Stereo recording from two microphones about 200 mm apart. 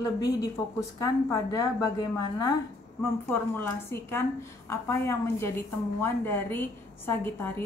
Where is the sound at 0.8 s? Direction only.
15° left (ahead or behind).